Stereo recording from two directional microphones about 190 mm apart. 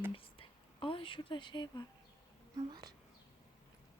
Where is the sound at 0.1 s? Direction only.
30° left (ahead or behind).